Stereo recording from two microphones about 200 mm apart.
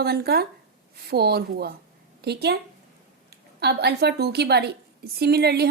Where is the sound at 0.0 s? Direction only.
55° right (ahead or behind).